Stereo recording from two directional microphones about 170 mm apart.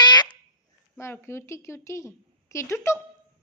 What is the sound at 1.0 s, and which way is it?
A woman's voice, 15° left (ahead or behind).